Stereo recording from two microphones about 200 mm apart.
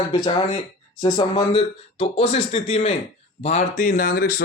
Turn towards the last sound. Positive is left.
turn(degrees=45)  # may be behind; listen again after turning